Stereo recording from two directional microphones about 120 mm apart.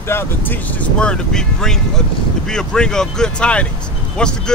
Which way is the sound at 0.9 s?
5° left (ahead or behind).